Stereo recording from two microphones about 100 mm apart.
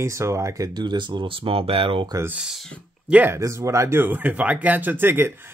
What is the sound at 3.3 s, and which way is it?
Speech, 30° right (ahead or behind).